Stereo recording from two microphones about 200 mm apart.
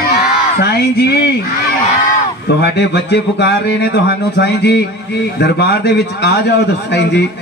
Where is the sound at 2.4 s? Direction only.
55° left (ahead or behind).